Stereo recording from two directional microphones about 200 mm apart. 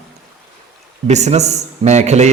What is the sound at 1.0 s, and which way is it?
A man's voice, 35° right (ahead or behind).